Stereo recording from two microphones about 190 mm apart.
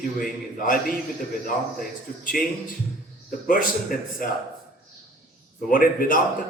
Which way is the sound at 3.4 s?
45° left (ahead or behind).